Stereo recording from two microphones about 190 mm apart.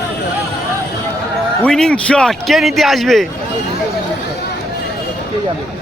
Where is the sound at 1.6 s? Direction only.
5° left (ahead or behind).